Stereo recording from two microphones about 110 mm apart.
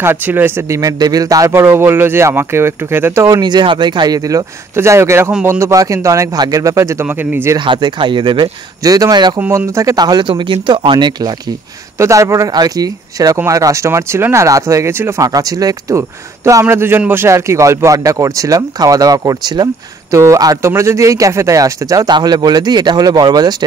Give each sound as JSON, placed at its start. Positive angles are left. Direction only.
{"t": 0.0, "sound": "speech", "side_deg": -20}
{"t": 1.5, "sound": "a man's voice", "side_deg": -20}
{"t": 3.3, "sound": "a man's voice", "side_deg": -40}
{"t": 7.1, "sound": "speech", "side_deg": -15}
{"t": 7.5, "sound": "speech", "side_deg": -45}
{"t": 9.6, "sound": "speech", "side_deg": -25}
{"t": 12.0, "sound": "a man's voice", "side_deg": -30}
{"t": 15.2, "sound": "a man's voice", "side_deg": -35}
{"t": 20.1, "sound": "speech", "side_deg": -30}